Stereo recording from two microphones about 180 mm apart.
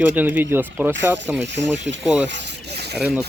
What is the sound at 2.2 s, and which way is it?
Mechanisms, 70° right (ahead or behind).